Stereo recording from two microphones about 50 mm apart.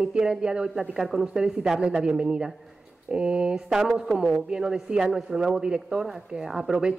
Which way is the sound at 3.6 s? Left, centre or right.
Centre.